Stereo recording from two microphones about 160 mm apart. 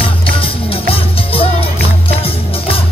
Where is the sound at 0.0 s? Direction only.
35° left (ahead or behind).